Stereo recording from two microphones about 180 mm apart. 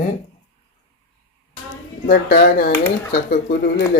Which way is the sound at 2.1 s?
55° left (ahead or behind).